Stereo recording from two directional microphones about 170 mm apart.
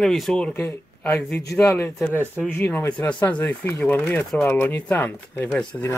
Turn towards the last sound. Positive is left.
turn(degrees=10)  # may be behind; listen again after turning